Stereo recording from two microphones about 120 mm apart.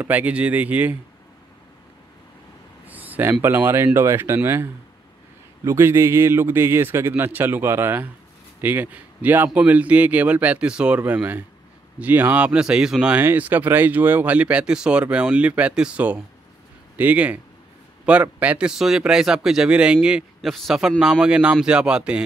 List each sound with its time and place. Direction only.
0.0 s speech: 15° right (ahead or behind)
2.9 s a sound: 15° right (ahead or behind)
3.4 s a man's voice: 20° right (ahead or behind)